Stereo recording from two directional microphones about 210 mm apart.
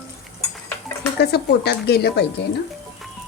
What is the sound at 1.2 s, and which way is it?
A woman's voice, 50° left (ahead or behind).